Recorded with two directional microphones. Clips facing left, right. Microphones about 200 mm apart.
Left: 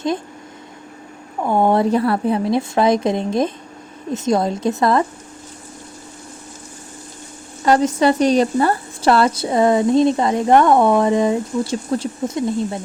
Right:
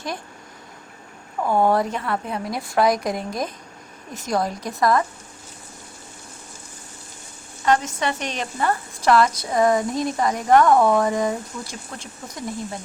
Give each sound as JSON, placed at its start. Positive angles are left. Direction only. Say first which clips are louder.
{"t": 1.4, "sound": "speech", "louder": "left 3 dB", "side_deg": 20}
{"t": 7.6, "sound": "speech", "louder": "left 7 dB", "side_deg": 35}